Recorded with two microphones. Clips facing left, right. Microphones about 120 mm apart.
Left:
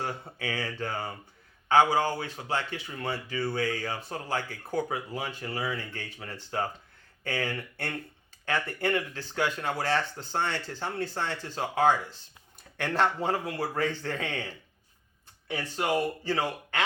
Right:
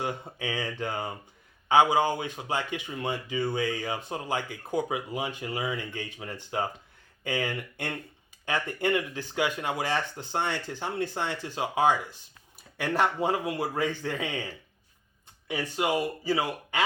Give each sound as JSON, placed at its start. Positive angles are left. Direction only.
{"t": 0.0, "sound": "speech", "side_deg": -15}